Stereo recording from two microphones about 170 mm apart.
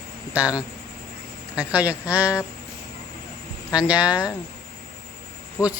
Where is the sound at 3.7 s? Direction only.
5° right (ahead or behind).